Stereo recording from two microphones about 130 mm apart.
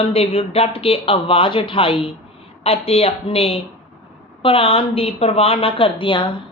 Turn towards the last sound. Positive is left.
turn(degrees=40)  # may be behind; listen again after turning